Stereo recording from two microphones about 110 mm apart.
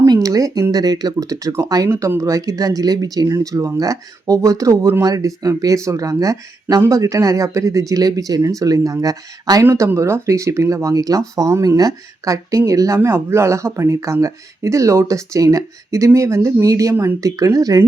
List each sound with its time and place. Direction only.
0.0 s speech: 30° right (ahead or behind)